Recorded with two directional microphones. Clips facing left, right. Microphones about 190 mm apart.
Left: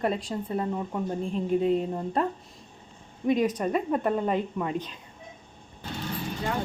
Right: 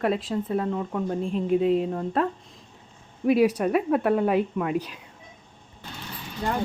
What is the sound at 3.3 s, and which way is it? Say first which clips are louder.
Speech: right 4 dB; 10° right (ahead or behind).